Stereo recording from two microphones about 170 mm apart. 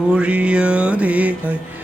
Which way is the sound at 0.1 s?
10° right (ahead or behind).